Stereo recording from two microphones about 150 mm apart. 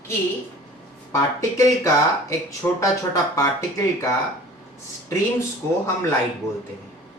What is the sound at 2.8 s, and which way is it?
Speech, 20° left (ahead or behind).